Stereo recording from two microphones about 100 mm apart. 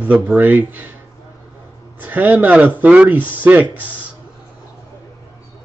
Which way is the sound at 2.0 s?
15° right (ahead or behind).